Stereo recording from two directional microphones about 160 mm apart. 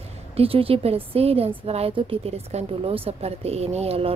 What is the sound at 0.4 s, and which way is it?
A woman's voice, 35° right (ahead or behind).